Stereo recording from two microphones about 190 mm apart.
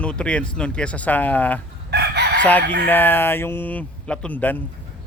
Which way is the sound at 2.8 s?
10° left (ahead or behind).